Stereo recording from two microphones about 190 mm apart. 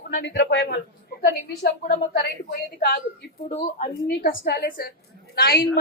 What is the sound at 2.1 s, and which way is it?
A woman's voice, 50° left (ahead or behind).